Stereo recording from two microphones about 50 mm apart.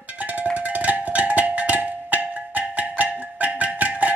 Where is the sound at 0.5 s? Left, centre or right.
Right.